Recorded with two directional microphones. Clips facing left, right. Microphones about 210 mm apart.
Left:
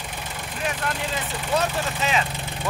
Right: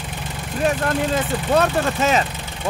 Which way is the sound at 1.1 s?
45° right (ahead or behind).